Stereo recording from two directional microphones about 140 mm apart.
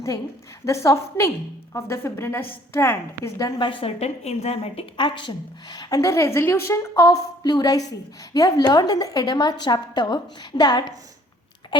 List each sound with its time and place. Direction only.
0.6 s a woman's voice: 20° left (ahead or behind)
3.3 s a woman's voice: 30° left (ahead or behind)